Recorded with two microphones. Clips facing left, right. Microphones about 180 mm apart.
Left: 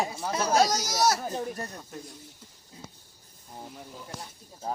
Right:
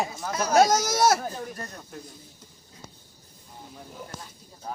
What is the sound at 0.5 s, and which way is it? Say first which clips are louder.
Speech: right 6 dB; 50° right (ahead or behind).